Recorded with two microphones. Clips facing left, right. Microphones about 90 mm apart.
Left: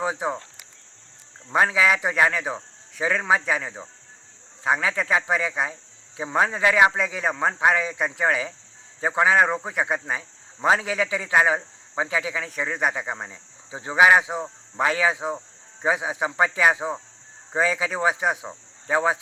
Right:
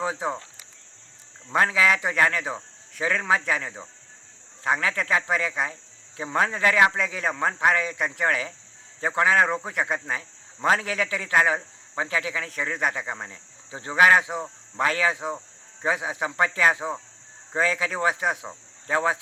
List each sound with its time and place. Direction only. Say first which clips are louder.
0.0 s speech: left 2 dB; 15° left (ahead or behind)
1.5 s speech: left 1 dB; 15° left (ahead or behind)